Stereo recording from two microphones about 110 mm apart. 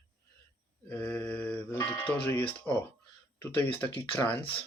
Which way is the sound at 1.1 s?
15° left (ahead or behind).